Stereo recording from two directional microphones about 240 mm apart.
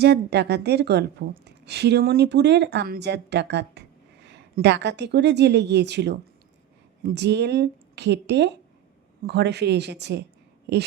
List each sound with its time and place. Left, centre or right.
0.0 s a woman's voice: right